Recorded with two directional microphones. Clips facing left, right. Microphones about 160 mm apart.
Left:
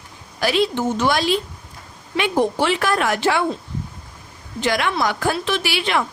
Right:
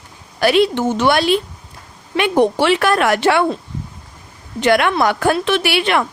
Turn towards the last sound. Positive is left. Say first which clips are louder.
# right 5 dB
turn(degrees=-60)  # may be behind; listen again after turning